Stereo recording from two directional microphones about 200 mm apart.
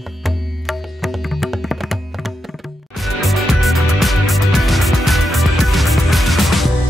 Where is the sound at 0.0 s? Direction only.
Centre (ahead or behind).